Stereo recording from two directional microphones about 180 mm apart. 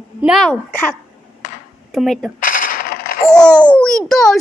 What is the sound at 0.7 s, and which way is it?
Speech, 10° left (ahead or behind).